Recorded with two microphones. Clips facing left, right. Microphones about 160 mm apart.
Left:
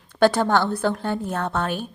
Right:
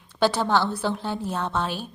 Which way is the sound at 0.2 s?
50° left (ahead or behind).